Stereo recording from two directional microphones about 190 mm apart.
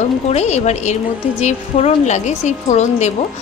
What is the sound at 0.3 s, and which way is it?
A woman's voice, 35° left (ahead or behind).